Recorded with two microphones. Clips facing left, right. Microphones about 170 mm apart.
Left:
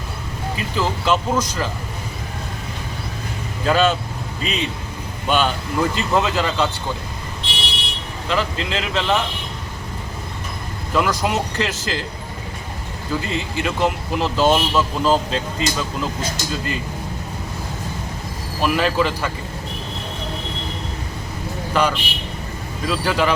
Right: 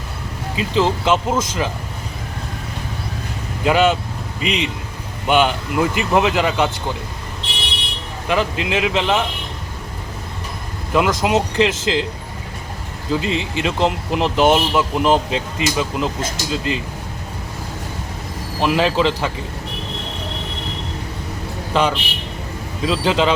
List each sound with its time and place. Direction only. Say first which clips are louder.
0.5 s speech: right 6 dB; 20° right (ahead or behind)
3.6 s speech: right 2 dB; 15° right (ahead or behind)
4.4 s a man's voice: right 3 dB; 70° right (ahead or behind)
5.2 s speech: right 3 dB; 15° right (ahead or behind)
8.3 s speech: right 3 dB; 15° right (ahead or behind)
10.9 s speech: right 3 dB; 20° right (ahead or behind)
13.1 s speech: right 4 dB; 20° right (ahead or behind)
18.6 s speech: right 2 dB; 20° right (ahead or behind)
21.7 s speech: right 2 dB; 20° right (ahead or behind)